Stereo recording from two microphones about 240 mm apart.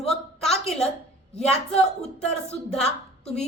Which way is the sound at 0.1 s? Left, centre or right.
Centre.